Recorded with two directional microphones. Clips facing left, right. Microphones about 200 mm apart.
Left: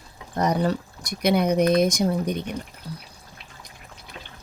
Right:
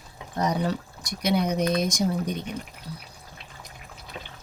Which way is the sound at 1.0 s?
60° left (ahead or behind).